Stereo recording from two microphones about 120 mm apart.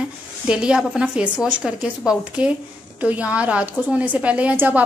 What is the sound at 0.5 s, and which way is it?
A woman's voice, 5° right (ahead or behind).